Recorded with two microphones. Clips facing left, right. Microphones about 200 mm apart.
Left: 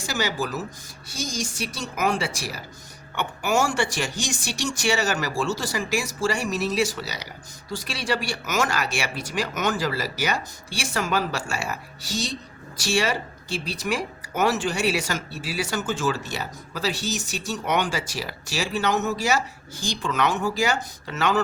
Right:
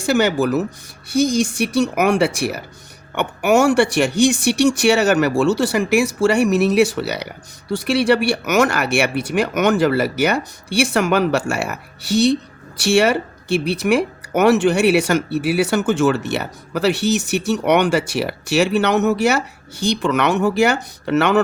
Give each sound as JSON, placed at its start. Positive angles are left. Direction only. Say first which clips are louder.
{"t": 0.0, "sound": "speech", "louder": "right 11 dB", "side_deg": -60}